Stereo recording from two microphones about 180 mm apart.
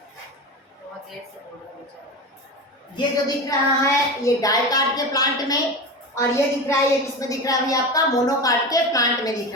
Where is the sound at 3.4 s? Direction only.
20° left (ahead or behind).